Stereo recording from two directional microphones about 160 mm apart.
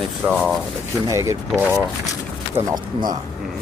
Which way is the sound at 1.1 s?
15° right (ahead or behind).